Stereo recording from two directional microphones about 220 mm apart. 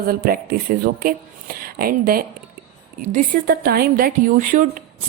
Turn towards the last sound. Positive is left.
turn(degrees=-35)  # may be behind; listen again after turning